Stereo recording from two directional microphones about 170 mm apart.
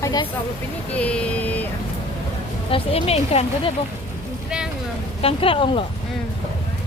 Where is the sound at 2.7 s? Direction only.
35° left (ahead or behind).